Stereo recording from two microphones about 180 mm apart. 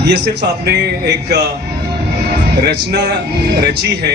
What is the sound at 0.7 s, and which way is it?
Speech, 65° right (ahead or behind).